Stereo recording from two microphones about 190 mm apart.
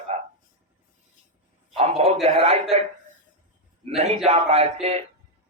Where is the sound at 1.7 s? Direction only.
30° right (ahead or behind).